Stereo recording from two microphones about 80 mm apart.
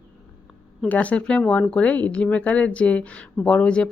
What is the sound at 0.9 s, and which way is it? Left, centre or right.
Speech, centre.